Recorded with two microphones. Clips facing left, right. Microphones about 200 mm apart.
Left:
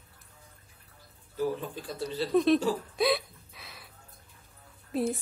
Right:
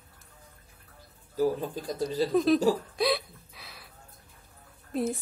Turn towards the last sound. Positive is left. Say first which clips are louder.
# even
turn(degrees=0)  # may be behind; listen again after turning